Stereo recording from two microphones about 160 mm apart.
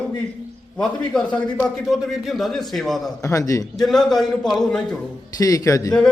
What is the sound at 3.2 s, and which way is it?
Speech, 20° left (ahead or behind).